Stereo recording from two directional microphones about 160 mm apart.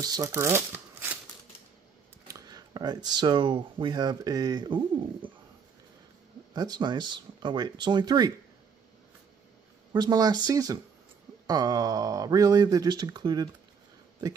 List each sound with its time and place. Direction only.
0.0 s speech: 20° right (ahead or behind)
2.2 s speech: 20° right (ahead or behind)
6.5 s speech: 25° right (ahead or behind)
9.9 s speech: 25° right (ahead or behind)